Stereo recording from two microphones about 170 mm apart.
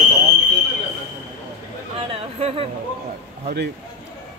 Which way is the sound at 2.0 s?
35° right (ahead or behind).